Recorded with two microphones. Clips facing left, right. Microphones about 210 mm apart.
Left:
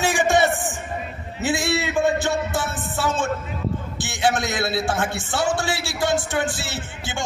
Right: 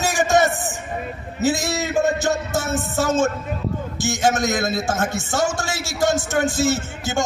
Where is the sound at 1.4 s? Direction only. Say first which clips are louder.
Right 2 dB; 40° right (ahead or behind).